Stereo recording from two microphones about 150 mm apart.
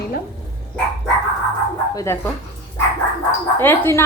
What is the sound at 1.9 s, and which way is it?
Speech, 20° left (ahead or behind).